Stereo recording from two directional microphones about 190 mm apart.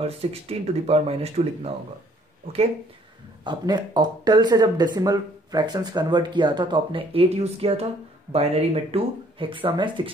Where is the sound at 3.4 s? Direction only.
20° right (ahead or behind).